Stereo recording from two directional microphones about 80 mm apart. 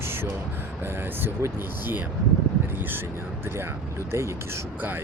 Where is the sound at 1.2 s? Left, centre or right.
Right.